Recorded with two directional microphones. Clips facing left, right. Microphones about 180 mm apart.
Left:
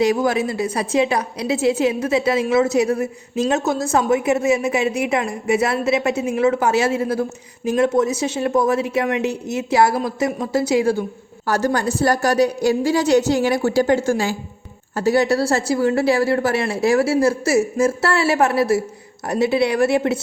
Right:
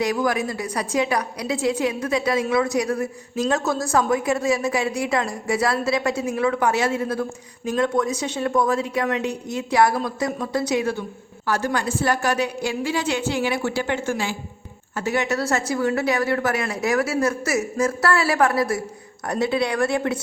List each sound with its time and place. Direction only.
0.0 s a woman's voice: 25° left (ahead or behind)
11.4 s a woman's voice: 40° left (ahead or behind); by 20.1 s 25° left (ahead or behind)